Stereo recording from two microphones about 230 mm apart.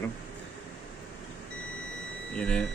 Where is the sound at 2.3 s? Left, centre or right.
Centre.